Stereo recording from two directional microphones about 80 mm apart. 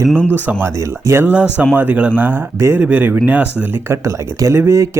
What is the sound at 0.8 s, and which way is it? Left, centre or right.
Speech, right.